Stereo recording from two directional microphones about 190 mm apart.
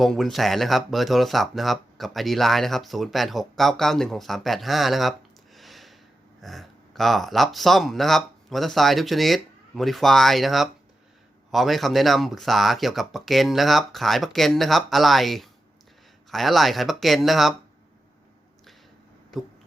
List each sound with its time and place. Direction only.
0.0 s speech: centre (ahead or behind)
5.5 s a sound: centre (ahead or behind)
6.4 s speech: centre (ahead or behind)